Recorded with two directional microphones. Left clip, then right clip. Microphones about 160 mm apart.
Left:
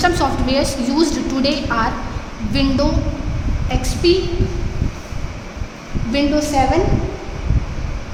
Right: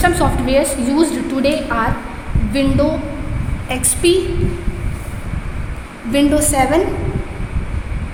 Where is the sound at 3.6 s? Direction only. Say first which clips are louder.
Right 1 dB; 40° right (ahead or behind).